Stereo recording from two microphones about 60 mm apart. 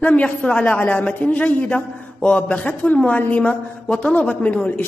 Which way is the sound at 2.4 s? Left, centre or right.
Left.